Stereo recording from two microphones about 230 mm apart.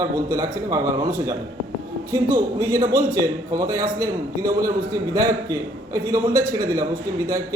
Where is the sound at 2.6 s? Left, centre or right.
Centre.